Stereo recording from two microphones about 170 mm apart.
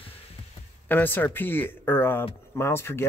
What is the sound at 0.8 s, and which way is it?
Speech, 10° left (ahead or behind).